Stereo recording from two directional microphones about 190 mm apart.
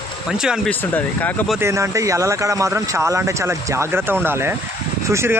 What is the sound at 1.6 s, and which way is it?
Speech, 15° right (ahead or behind).